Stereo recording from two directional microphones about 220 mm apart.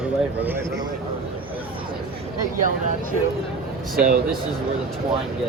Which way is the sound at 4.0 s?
40° right (ahead or behind).